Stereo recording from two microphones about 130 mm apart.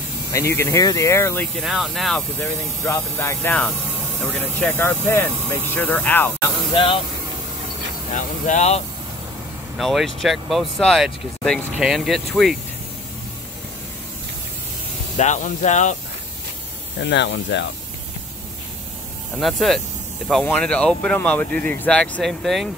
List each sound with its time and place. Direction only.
0.3 s speech: 25° left (ahead or behind)
1.6 s speech: centre (ahead or behind)
2.3 s speech: 20° left (ahead or behind)
6.7 s speech: 45° left (ahead or behind)
8.1 s speech: 70° left (ahead or behind)
9.8 s speech: centre (ahead or behind)
15.1 s speech: 70° left (ahead or behind)
19.3 s speech: centre (ahead or behind)